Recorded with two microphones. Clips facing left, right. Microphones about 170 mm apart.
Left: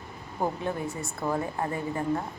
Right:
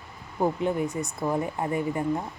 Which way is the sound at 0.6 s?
20° right (ahead or behind).